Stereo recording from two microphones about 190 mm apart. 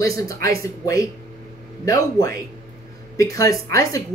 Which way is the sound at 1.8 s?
15° left (ahead or behind).